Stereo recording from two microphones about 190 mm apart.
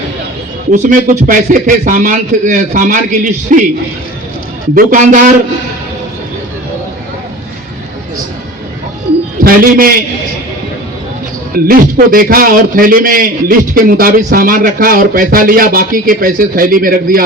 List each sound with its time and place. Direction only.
0.7 s a man's voice: 45° right (ahead or behind)
4.7 s a man's voice: 45° right (ahead or behind)
9.4 s a man's voice: 50° right (ahead or behind)
11.5 s a man's voice: 50° right (ahead or behind)